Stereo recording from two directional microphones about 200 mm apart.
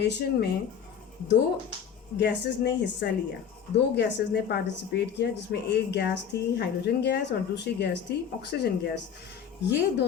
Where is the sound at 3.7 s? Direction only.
60° left (ahead or behind).